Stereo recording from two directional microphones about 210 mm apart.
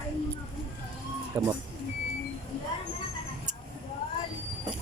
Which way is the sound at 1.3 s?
15° right (ahead or behind).